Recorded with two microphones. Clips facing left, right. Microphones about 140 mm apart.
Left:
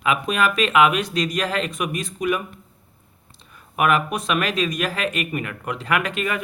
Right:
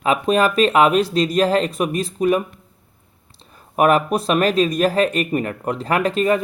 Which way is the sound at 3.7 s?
35° right (ahead or behind).